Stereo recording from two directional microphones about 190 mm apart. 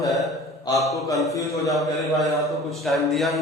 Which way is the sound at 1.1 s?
15° left (ahead or behind).